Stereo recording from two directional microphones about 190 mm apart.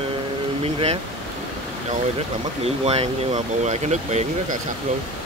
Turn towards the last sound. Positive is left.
turn(degrees=-35)  # may be behind; listen again after turning